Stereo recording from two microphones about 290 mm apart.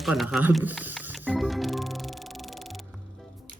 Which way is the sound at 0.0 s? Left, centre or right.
Centre.